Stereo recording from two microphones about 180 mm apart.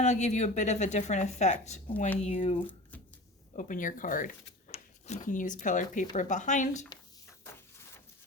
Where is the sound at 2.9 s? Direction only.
10° left (ahead or behind).